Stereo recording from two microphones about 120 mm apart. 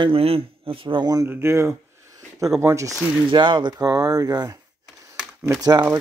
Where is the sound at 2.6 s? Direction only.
25° right (ahead or behind).